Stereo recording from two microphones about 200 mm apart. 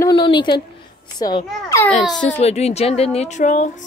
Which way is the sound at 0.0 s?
25° left (ahead or behind).